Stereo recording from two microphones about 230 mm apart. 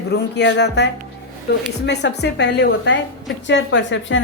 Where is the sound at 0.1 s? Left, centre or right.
Left.